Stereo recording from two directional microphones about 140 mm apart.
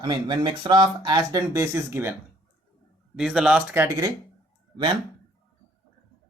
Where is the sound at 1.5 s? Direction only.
15° right (ahead or behind).